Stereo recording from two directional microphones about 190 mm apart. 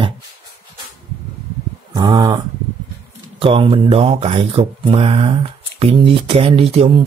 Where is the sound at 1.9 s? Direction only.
20° right (ahead or behind).